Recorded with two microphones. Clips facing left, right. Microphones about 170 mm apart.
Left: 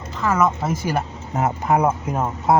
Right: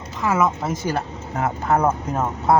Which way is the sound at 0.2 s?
5° right (ahead or behind).